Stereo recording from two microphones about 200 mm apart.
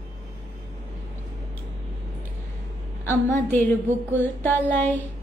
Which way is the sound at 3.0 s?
10° left (ahead or behind).